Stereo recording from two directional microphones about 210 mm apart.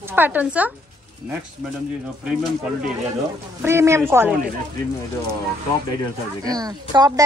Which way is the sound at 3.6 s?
15° right (ahead or behind).